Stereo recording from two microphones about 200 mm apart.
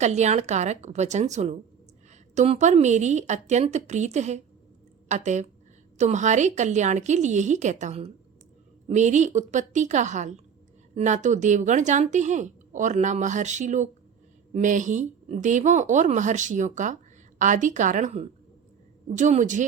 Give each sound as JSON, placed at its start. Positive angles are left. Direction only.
{"t": 0.0, "sound": "a woman's voice", "side_deg": -35}